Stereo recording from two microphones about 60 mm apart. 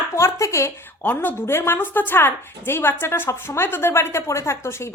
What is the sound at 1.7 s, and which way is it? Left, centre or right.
A woman's voice, left.